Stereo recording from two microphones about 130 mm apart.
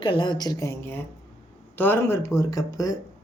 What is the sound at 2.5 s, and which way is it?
Speech, 25° left (ahead or behind).